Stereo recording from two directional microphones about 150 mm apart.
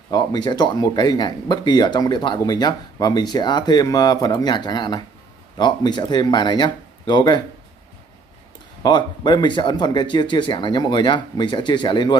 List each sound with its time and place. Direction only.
0.1 s speech: 30° left (ahead or behind)
8.8 s speech: 30° left (ahead or behind)